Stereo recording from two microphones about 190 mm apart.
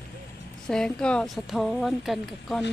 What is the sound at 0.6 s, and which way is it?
A woman's voice, 5° left (ahead or behind).